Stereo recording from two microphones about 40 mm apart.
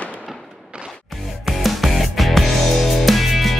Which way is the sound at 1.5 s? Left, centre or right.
Centre.